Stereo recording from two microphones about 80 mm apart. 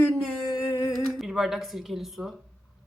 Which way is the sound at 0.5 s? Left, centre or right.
Left.